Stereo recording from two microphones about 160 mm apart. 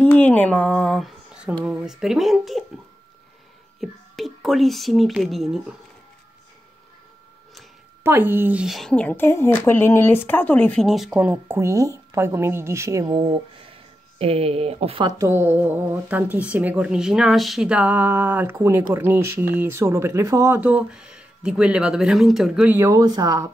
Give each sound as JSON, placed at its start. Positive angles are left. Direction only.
{"t": 0.0, "sound": "speech", "side_deg": 10}
{"t": 3.8, "sound": "speech", "side_deg": 0}
{"t": 8.0, "sound": "speech", "side_deg": -15}
{"t": 15.1, "sound": "speech", "side_deg": -15}
{"t": 22.8, "sound": "speech", "side_deg": -20}